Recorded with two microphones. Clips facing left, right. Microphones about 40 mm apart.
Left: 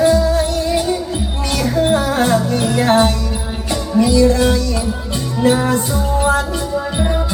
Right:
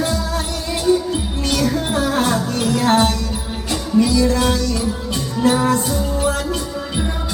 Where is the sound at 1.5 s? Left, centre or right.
Left.